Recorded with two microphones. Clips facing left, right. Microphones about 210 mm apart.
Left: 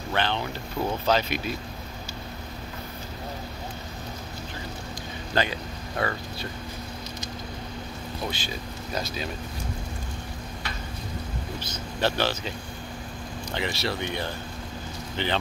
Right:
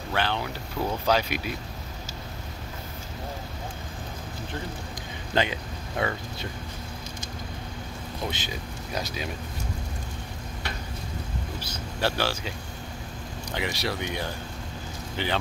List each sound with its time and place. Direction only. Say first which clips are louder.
0.1 s speech: left 1 dB; 5° right (ahead or behind)
5.3 s speech: right 1 dB; 20° right (ahead or behind)
8.3 s speech: left 1 dB; 15° right (ahead or behind)
11.6 s speech: left 2 dB; 10° right (ahead or behind)